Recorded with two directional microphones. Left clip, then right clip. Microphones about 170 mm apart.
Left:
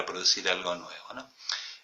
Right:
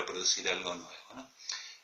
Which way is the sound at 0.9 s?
15° right (ahead or behind).